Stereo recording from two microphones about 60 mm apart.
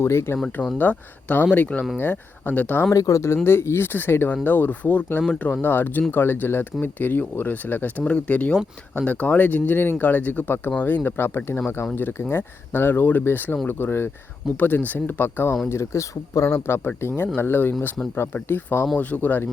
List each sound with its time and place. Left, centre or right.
0.0 s speech: left
0.8 s speech: left
2.9 s speech: left
3.4 s speech: left
15.7 s speech: left
16.6 s speech: left
18.9 s speech: left